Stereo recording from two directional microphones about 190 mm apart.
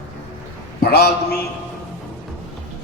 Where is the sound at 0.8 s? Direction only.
55° left (ahead or behind).